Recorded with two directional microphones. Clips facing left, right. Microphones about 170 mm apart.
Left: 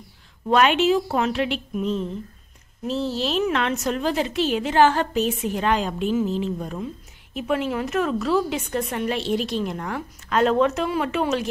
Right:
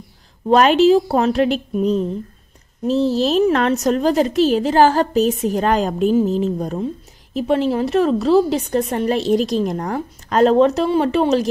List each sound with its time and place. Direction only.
0.5 s a woman's voice: 35° right (ahead or behind)